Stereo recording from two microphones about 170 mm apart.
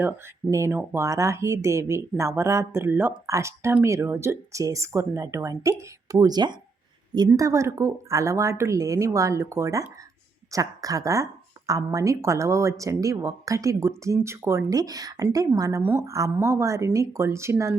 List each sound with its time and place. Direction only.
0.5 s speech: 15° right (ahead or behind)